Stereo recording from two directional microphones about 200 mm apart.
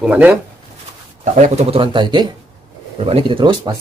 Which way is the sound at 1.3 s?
35° right (ahead or behind).